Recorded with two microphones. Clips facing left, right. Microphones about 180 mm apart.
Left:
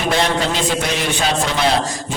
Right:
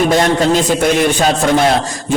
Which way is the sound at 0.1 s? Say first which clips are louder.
Right 6 dB; 45° right (ahead or behind).